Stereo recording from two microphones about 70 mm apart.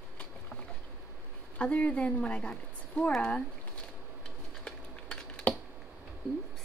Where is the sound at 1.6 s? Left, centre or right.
Centre.